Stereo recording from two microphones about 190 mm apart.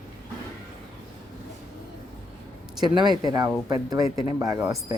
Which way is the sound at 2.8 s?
25° right (ahead or behind).